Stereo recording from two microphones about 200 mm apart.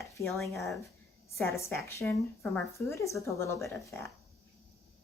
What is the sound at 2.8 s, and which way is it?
Speech, 15° left (ahead or behind).